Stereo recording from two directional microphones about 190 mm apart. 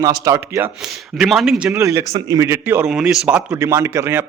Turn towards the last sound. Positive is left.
turn(degrees=-10)  # may be behind; listen again after turning